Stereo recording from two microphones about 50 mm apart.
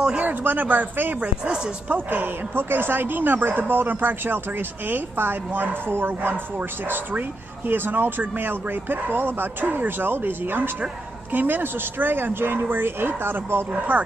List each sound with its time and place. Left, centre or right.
0.2 s speech: right
1.2 s speech: centre
1.9 s speech: right
13.7 s speech: right